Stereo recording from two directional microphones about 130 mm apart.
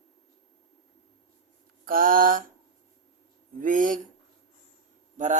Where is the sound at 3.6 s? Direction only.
90° right.